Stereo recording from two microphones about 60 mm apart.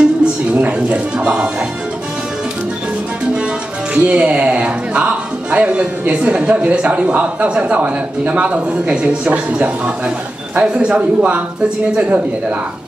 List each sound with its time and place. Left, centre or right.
0.0 s music: right
3.9 s speech: centre